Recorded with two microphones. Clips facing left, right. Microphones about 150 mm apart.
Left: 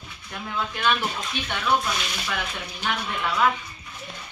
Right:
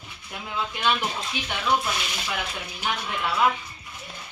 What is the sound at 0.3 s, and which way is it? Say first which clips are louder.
Speech: left 1 dB; 20° right (ahead or behind).